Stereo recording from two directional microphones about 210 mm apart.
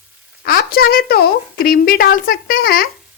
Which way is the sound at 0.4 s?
45° left (ahead or behind).